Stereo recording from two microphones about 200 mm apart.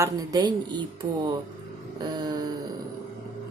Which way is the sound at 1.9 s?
20° right (ahead or behind).